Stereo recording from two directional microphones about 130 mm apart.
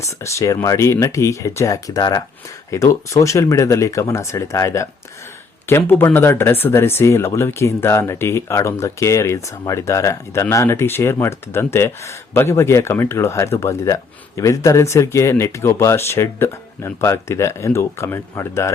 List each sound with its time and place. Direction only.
0.0 s speech: 25° left (ahead or behind)